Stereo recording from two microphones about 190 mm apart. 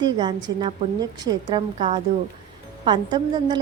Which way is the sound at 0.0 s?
25° right (ahead or behind).